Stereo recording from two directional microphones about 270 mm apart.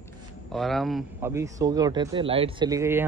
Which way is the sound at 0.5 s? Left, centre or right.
Centre.